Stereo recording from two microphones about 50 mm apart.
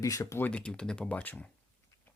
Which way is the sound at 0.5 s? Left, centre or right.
Centre.